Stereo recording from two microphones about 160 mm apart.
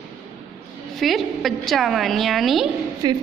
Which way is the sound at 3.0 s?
25° right (ahead or behind).